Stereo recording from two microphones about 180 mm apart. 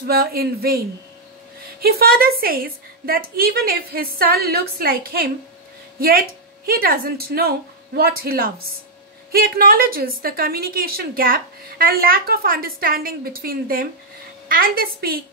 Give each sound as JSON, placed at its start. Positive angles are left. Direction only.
{"t": 0.0, "sound": "a woman's voice", "side_deg": -55}